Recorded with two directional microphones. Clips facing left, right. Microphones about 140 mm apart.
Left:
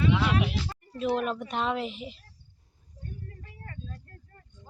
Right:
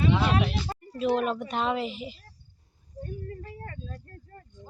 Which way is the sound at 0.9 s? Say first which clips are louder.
Right 2 dB; centre (ahead or behind).